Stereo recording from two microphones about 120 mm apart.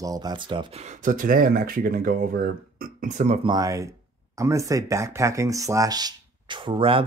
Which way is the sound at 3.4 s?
30° right (ahead or behind).